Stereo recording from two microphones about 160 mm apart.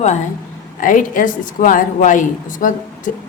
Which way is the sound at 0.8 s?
55° left (ahead or behind).